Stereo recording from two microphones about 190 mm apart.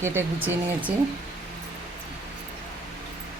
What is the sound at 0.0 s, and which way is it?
Speech, 10° right (ahead or behind).